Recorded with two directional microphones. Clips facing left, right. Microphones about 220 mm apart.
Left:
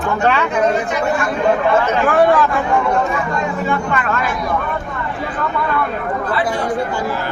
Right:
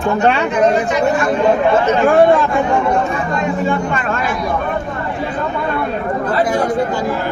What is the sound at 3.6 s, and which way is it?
Speech, 30° right (ahead or behind).